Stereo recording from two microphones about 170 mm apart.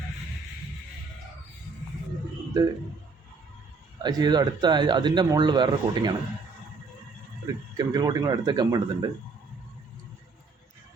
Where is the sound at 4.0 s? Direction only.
25° right (ahead or behind).